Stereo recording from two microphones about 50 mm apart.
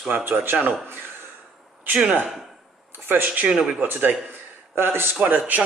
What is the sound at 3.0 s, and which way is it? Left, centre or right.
A man's voice, right.